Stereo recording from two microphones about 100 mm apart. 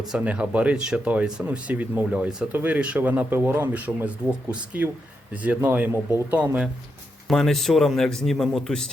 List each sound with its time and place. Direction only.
0.2 s speech: 10° right (ahead or behind)
7.3 s speech: centre (ahead or behind)